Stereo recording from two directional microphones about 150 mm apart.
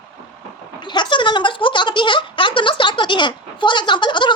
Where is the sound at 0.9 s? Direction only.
30° left (ahead or behind).